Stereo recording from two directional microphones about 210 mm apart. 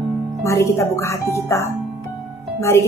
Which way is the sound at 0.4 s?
15° left (ahead or behind).